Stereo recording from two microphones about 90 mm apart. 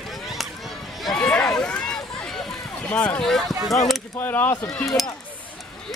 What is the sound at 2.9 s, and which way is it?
Speech, 15° left (ahead or behind).